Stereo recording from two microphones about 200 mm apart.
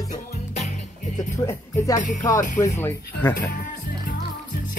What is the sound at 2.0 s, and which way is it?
Speech, 40° left (ahead or behind).